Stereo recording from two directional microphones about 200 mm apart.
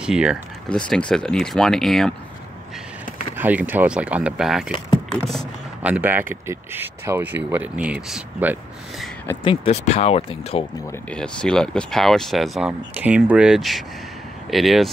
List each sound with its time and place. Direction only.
0.0 s speech: 5° right (ahead or behind)
3.3 s speech: 10° right (ahead or behind)
4.9 s a sound: centre (ahead or behind)
5.8 s speech: 10° right (ahead or behind)
9.4 s speech: 30° left (ahead or behind)
10.9 s speech: 5° left (ahead or behind)